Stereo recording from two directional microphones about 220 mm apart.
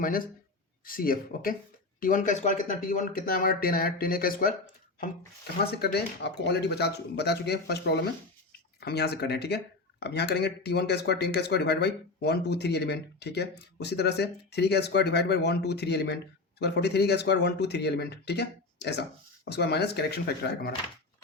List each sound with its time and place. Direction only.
0.0 s speech: 40° left (ahead or behind)
5.7 s speech: 45° left (ahead or behind)